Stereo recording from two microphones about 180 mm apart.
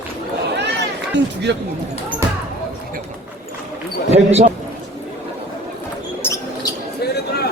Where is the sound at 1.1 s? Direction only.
70° right (ahead or behind).